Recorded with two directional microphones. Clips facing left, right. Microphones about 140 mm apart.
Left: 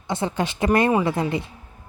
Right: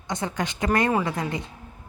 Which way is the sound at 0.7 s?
15° left (ahead or behind).